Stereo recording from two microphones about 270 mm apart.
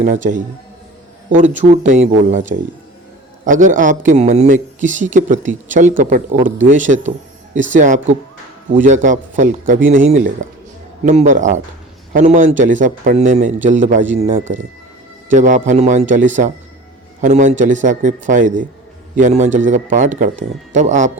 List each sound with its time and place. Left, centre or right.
0.0 s speech: right